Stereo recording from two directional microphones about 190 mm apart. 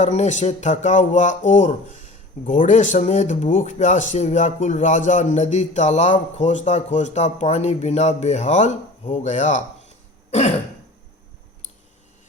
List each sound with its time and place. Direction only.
0.0 s speech: 40° left (ahead or behind)